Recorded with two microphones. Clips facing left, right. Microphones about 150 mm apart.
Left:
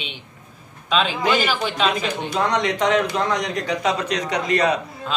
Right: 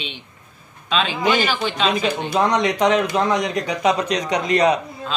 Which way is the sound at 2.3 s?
10° right (ahead or behind).